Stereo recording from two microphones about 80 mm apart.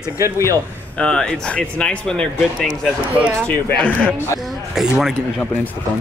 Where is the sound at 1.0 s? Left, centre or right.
Centre.